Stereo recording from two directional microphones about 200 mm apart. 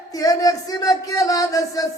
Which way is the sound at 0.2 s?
15° left (ahead or behind).